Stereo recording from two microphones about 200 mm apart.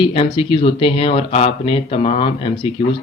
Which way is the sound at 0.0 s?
25° left (ahead or behind).